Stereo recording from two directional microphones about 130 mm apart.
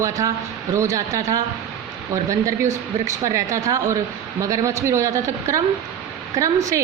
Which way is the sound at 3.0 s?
25° right (ahead or behind).